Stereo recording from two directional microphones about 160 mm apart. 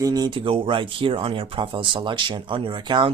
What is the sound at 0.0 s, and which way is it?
Speech, 25° right (ahead or behind).